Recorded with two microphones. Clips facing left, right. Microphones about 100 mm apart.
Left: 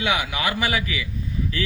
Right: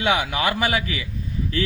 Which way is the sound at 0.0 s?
35° right (ahead or behind).